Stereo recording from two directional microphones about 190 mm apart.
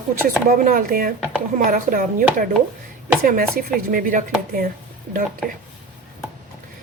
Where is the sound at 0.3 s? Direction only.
50° right (ahead or behind).